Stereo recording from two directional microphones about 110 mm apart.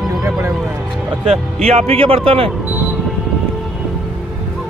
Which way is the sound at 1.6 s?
65° right (ahead or behind).